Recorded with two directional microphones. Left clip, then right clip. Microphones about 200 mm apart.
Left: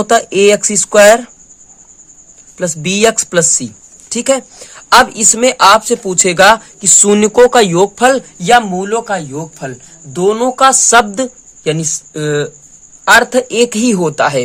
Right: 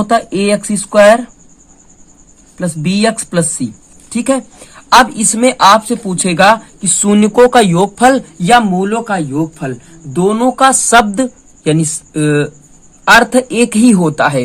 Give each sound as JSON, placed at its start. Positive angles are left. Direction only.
{"t": 0.0, "sound": "speech", "side_deg": 30}
{"t": 2.6, "sound": "a woman's voice", "side_deg": 25}